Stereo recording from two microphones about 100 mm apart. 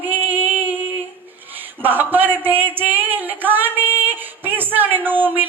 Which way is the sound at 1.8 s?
20° right (ahead or behind).